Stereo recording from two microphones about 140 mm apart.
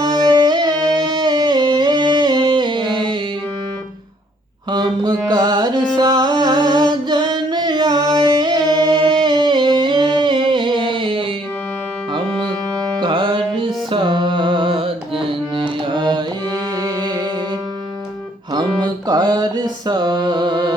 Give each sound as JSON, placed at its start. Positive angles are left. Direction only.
{"t": 0.0, "sound": "music", "side_deg": -30}
{"t": 4.7, "sound": "mantra", "side_deg": -30}
{"t": 5.3, "sound": "music", "side_deg": -30}
{"t": 13.0, "sound": "music", "side_deg": -35}
{"t": 18.5, "sound": "mantra", "side_deg": -30}